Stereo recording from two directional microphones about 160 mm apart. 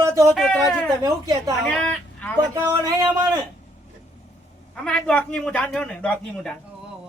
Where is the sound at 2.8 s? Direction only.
25° right (ahead or behind).